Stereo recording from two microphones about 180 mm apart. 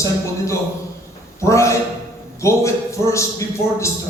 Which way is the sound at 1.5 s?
15° left (ahead or behind).